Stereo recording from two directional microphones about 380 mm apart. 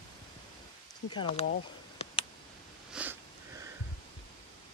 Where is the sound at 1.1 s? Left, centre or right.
Centre.